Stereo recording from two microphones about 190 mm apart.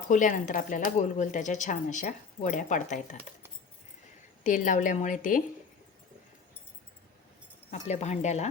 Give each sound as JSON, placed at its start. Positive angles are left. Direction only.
{"t": 0.1, "sound": "speech", "side_deg": 45}
{"t": 4.4, "sound": "speech", "side_deg": 40}
{"t": 7.7, "sound": "speech", "side_deg": 35}